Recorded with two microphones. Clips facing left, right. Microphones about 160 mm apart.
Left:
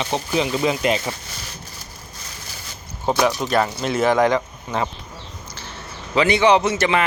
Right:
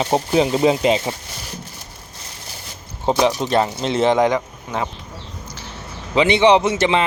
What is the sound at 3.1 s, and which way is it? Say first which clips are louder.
A man's voice: right 2 dB; 25° right (ahead or behind).